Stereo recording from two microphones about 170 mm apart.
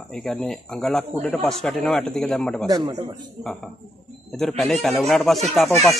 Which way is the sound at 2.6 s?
20° right (ahead or behind).